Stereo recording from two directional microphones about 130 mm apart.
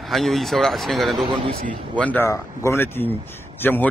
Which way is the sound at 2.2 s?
20° left (ahead or behind).